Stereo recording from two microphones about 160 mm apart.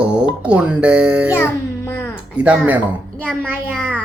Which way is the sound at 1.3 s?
15° left (ahead or behind).